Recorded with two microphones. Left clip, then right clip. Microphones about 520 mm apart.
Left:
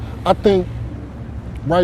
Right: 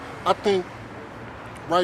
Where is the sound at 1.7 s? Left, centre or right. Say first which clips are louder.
Left 6 dB; left.